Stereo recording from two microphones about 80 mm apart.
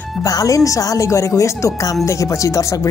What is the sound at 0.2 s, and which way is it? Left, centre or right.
Speech, left.